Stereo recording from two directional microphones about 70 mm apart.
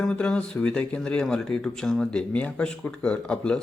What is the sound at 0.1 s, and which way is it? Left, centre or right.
Speech, centre.